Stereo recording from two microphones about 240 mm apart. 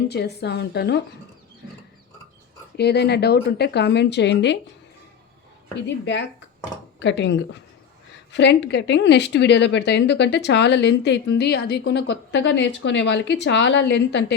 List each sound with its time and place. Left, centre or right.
0.1 s speech: left
2.7 s speech: left
7.0 s speech: left